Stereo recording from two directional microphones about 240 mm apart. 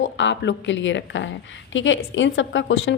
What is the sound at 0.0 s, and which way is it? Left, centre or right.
A woman's voice, left.